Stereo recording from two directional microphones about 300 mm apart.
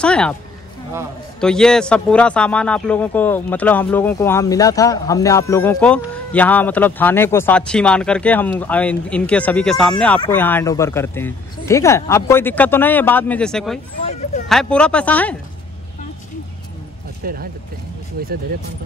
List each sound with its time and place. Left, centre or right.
0.0 s a man's voice: centre
1.4 s a man's voice: centre
17.2 s speech: right